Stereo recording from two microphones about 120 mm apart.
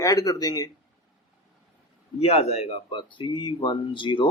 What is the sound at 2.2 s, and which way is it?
Speech, 55° left (ahead or behind).